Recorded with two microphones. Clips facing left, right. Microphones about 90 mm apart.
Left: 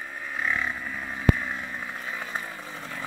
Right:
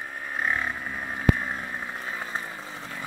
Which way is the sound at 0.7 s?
25° right (ahead or behind).